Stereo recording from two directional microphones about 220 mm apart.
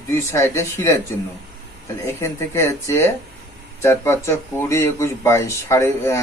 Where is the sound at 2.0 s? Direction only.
10° left (ahead or behind).